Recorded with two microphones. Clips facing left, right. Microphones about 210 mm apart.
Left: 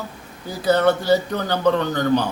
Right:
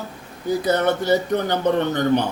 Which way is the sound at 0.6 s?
20° right (ahead or behind).